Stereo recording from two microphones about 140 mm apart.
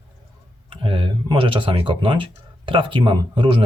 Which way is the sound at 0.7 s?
35° right (ahead or behind).